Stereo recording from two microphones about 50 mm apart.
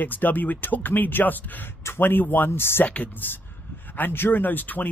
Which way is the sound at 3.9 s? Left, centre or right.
Left.